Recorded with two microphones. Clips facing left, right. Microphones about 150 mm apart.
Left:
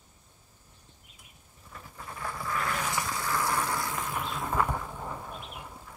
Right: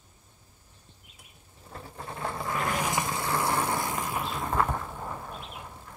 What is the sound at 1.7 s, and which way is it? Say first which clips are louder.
Vehicle: right 4 dB; 35° right (ahead or behind).